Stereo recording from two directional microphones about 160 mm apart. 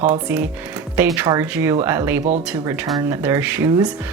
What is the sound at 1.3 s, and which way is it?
Speech, 15° right (ahead or behind).